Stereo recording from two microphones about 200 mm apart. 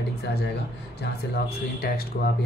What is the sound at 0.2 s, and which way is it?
Speech, 55° left (ahead or behind).